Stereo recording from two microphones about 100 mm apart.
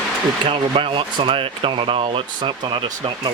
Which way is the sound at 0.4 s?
65° right (ahead or behind).